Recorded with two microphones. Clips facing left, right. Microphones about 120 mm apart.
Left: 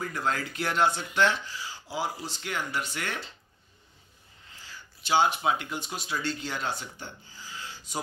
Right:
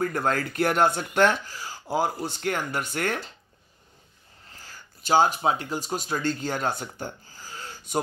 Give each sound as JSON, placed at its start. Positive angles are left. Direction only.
{"t": 0.0, "sound": "speech", "side_deg": -50}
{"t": 4.5, "sound": "speech", "side_deg": -45}